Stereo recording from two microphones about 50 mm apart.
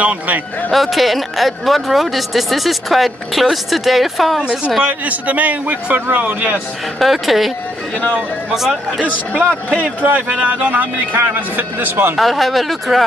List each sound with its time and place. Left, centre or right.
0.0 s a man's voice: right
0.7 s speech: centre
4.4 s a woman's voice: centre
4.8 s a man's voice: right
7.0 s speech: centre
8.5 s speech: centre
10.0 s a man's voice: right
12.2 s speech: centre